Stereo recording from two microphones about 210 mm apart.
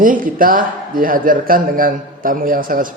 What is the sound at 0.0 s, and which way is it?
A man's voice, 40° right (ahead or behind).